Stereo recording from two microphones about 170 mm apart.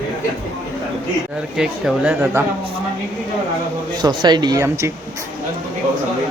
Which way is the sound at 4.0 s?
25° right (ahead or behind).